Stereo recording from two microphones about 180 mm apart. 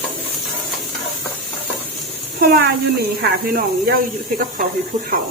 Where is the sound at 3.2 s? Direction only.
55° right (ahead or behind).